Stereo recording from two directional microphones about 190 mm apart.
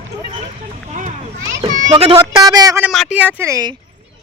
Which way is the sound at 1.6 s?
40° right (ahead or behind).